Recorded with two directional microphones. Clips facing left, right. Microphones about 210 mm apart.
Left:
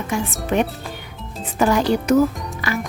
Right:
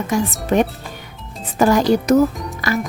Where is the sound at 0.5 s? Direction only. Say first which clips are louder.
Right 3 dB; 45° right (ahead or behind).